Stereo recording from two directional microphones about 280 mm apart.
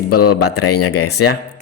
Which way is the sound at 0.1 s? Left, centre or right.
Left.